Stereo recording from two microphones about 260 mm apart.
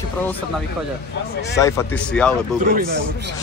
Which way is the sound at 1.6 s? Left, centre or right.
Centre.